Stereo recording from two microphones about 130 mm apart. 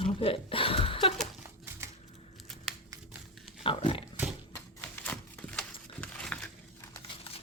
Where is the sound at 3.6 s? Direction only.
40° left (ahead or behind).